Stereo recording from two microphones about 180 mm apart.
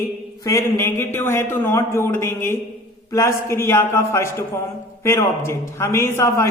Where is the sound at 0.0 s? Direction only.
15° left (ahead or behind).